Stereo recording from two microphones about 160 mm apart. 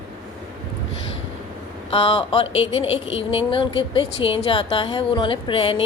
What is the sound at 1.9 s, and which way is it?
Speech, 35° left (ahead or behind).